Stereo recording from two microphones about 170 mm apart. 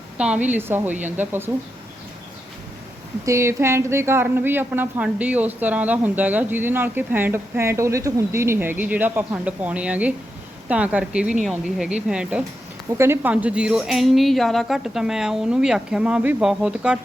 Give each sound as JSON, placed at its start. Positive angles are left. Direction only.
{"t": 0.2, "sound": "a woman's voice", "side_deg": -10}
{"t": 3.2, "sound": "a woman's voice", "side_deg": -15}